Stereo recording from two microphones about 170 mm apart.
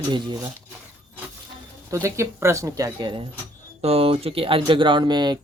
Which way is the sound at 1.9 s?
15° right (ahead or behind).